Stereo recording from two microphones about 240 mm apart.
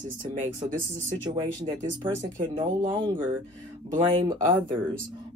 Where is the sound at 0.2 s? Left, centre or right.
Right.